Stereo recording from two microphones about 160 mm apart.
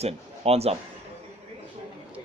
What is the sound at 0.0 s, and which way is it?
Speech, 40° right (ahead or behind).